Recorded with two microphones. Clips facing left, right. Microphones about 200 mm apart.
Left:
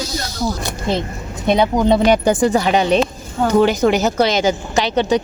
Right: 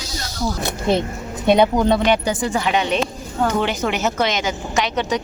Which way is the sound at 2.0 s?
45° left (ahead or behind).